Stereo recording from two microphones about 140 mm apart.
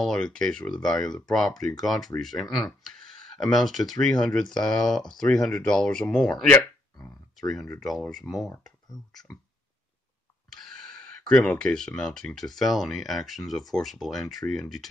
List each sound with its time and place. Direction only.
0.0 s speech: 5° left (ahead or behind)
10.5 s speech: 5° left (ahead or behind)